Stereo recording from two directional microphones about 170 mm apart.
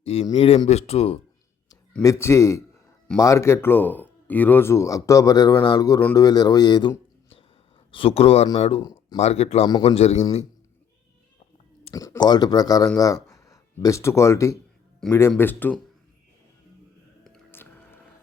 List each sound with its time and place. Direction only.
0.0 s speech: 35° left (ahead or behind)
2.0 s a man's voice: 15° left (ahead or behind)
9.1 s speech: 40° left (ahead or behind)
11.9 s speech: 15° left (ahead or behind)
15.0 s speech: 5° left (ahead or behind)
17.2 s music: 10° left (ahead or behind)